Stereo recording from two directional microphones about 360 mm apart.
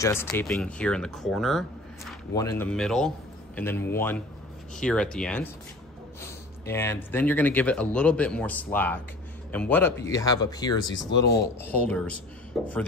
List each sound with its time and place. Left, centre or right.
0.0 s a man's voice: centre
6.7 s a man's voice: centre
10.8 s speech: left
12.6 s a man's voice: centre